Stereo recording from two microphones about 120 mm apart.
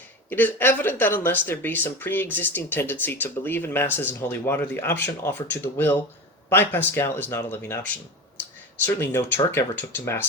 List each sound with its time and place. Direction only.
0.3 s speech: 15° left (ahead or behind)
8.9 s speech: 20° left (ahead or behind)